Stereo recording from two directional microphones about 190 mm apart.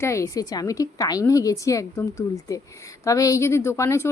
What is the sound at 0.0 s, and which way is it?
A woman's voice, 15° left (ahead or behind).